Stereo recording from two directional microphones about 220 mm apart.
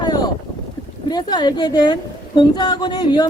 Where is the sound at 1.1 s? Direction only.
20° left (ahead or behind).